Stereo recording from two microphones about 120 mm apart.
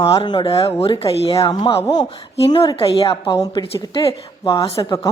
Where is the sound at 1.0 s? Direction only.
35° left (ahead or behind).